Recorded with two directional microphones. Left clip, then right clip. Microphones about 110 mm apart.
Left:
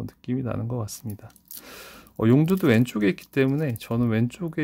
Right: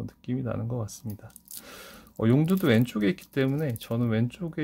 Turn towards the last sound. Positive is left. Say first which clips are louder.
# left 3 dB
turn(degrees=45)  # may be behind; listen again after turning